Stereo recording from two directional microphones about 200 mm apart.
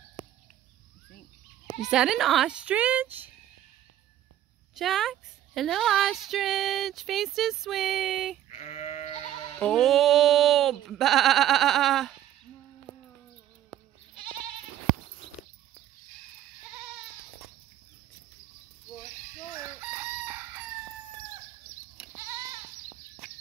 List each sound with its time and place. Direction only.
1.8 s speech: 5° right (ahead or behind)
4.7 s speech: centre (ahead or behind)
8.5 s sheep: 35° left (ahead or behind)
9.6 s speech: centre (ahead or behind)
19.5 s chicken: 10° right (ahead or behind)